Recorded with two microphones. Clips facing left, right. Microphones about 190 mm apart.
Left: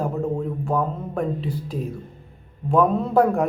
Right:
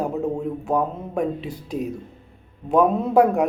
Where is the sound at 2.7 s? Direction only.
10° right (ahead or behind).